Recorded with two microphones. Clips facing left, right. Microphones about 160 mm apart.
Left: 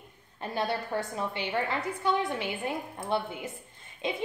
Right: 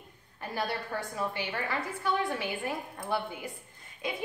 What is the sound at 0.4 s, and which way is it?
A woman's voice, 20° left (ahead or behind).